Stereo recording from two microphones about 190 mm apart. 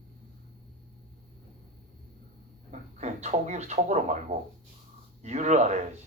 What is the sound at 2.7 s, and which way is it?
Speech, 35° right (ahead or behind).